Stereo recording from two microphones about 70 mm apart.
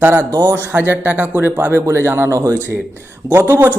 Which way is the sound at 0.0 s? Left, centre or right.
Right.